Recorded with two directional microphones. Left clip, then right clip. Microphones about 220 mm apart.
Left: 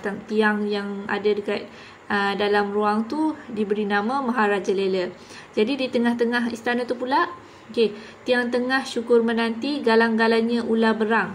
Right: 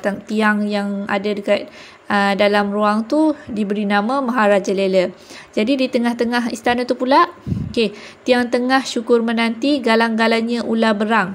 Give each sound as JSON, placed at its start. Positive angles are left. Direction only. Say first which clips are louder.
{"t": 0.0, "sound": "speech", "louder": "right 4 dB", "side_deg": -35}